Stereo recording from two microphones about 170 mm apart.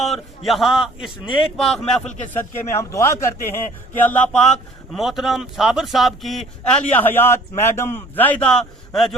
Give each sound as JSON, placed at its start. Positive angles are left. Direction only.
{"t": 0.0, "sound": "a man's voice", "side_deg": 0}
{"t": 2.9, "sound": "a man's voice", "side_deg": 15}